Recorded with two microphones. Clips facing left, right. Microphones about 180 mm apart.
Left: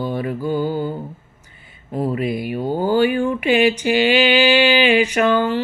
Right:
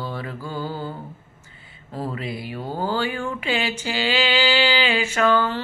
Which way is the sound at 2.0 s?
15° left (ahead or behind).